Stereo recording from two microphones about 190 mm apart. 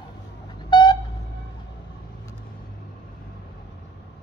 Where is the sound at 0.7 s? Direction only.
25° left (ahead or behind).